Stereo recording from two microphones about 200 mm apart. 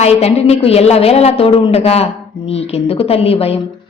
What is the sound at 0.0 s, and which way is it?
A woman's voice, 30° left (ahead or behind).